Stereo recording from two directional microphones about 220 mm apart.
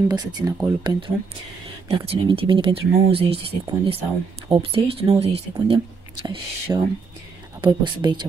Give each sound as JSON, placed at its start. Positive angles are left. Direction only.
{"t": 0.1, "sound": "speech", "side_deg": -20}